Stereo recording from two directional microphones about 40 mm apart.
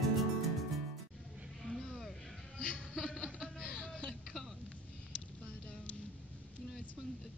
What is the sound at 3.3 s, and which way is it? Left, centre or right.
Laughter, left.